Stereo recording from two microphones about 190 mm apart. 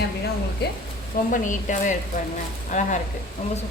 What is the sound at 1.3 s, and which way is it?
A woman's voice, 40° left (ahead or behind).